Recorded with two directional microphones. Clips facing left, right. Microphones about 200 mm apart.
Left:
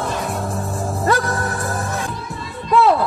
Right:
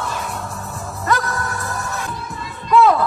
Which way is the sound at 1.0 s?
30° left (ahead or behind).